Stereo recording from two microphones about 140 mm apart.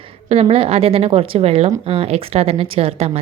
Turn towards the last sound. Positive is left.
turn(degrees=-45)  # may be behind; listen again after turning